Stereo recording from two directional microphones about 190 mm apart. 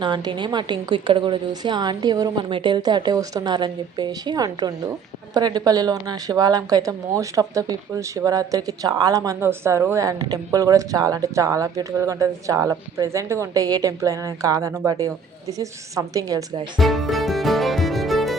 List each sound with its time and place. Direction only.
0.0 s a woman's voice: 25° right (ahead or behind)
16.7 s music: centre (ahead or behind)